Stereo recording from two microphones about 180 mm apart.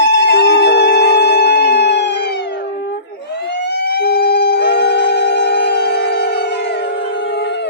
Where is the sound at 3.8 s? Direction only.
65° left (ahead or behind).